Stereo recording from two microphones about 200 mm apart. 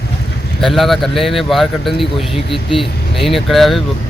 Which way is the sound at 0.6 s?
Centre (ahead or behind).